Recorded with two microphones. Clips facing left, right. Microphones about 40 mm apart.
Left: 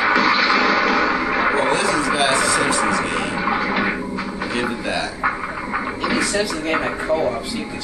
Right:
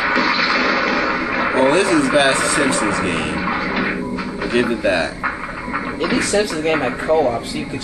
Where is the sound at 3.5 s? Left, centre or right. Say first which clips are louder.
Left 2 dB; centre.